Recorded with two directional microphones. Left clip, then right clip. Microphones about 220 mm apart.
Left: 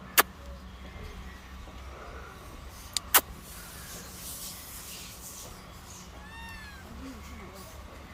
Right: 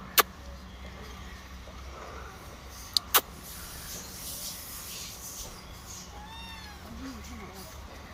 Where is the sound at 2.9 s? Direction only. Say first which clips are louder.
Right 1 dB; 20° left (ahead or behind).